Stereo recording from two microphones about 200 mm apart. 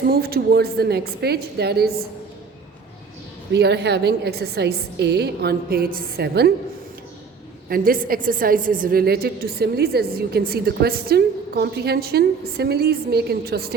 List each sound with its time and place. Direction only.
0.1 s a woman's voice: 50° right (ahead or behind)
3.5 s a woman's voice: 55° right (ahead or behind)
7.7 s a woman's voice: 45° right (ahead or behind)